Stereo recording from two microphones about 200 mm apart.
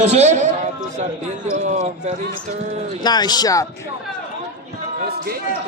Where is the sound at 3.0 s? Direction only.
20° left (ahead or behind).